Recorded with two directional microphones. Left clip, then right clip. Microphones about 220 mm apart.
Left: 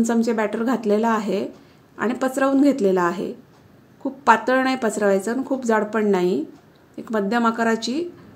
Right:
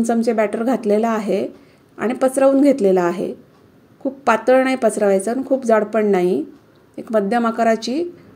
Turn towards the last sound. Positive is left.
turn(degrees=-10)  # may be behind; listen again after turning